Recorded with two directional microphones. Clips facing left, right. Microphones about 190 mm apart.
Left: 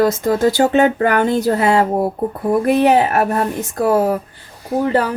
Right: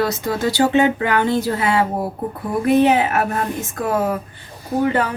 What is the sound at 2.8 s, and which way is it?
A woman's voice, 40° left (ahead or behind).